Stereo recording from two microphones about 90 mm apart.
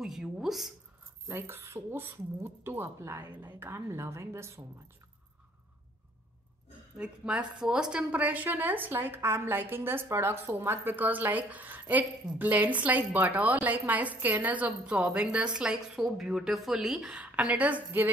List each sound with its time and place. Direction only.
0.0 s speech: 5° right (ahead or behind)
1.3 s a woman's voice: 25° right (ahead or behind)
7.0 s a woman's voice: 10° right (ahead or behind)